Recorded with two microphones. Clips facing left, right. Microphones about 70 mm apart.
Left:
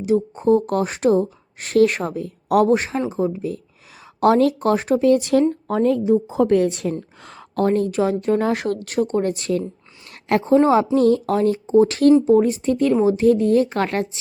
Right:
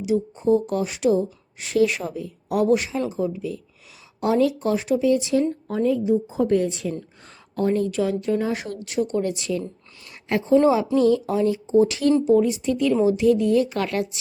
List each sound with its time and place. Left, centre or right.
0.0 s speech: left
2.6 s speech: left
4.2 s speech: left
6.2 s speech: left
10.3 s speech: left
10.9 s speech: left